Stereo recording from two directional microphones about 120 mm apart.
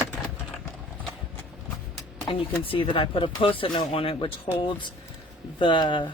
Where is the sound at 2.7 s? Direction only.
45° left (ahead or behind).